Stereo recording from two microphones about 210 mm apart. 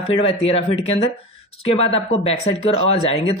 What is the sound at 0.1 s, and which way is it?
Speech, 30° left (ahead or behind).